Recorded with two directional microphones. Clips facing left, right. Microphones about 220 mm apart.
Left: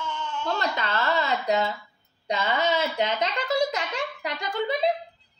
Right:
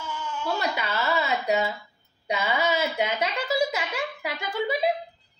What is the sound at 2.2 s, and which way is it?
A woman's voice, 10° right (ahead or behind).